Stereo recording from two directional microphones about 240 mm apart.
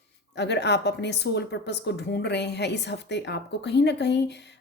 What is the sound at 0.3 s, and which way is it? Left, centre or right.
A woman's voice, left.